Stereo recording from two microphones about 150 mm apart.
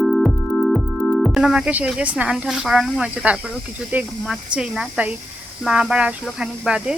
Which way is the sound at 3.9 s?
10° right (ahead or behind).